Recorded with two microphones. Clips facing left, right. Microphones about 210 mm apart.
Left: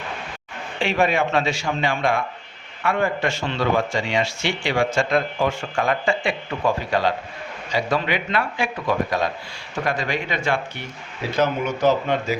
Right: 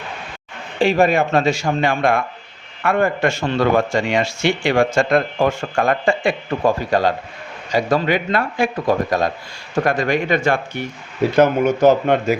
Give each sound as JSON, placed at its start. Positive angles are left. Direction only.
{"t": 0.8, "sound": "speech", "side_deg": -40}